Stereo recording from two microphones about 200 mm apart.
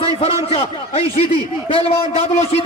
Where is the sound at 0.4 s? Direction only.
30° left (ahead or behind).